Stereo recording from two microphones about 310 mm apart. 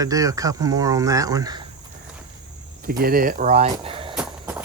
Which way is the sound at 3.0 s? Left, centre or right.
Right.